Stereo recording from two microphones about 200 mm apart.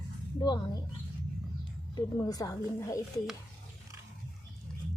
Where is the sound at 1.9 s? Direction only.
20° left (ahead or behind).